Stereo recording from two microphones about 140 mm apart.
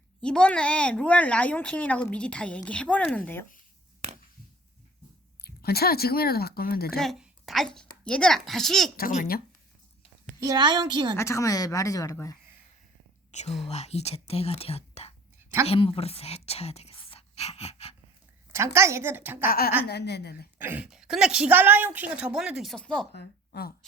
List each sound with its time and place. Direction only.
0.2 s speech: 5° left (ahead or behind)
5.4 s speech: 90° left
6.9 s a woman's voice: centre (ahead or behind)
9.0 s a woman's voice: 85° left
10.4 s a woman's voice: 30° right (ahead or behind)
11.2 s speech: 20° left (ahead or behind)
13.3 s speech: 55° left (ahead or behind)
18.5 s a woman's voice: 20° right (ahead or behind)
19.5 s a woman's voice: 90° left
20.6 s a woman's voice: 10° right (ahead or behind); by 23.0 s 5° left (ahead or behind)
23.5 s speech: 90° left